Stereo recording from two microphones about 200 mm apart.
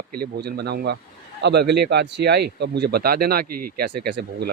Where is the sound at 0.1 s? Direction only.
50° right (ahead or behind).